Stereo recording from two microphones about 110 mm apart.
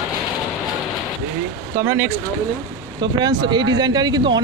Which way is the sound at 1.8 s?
25° right (ahead or behind).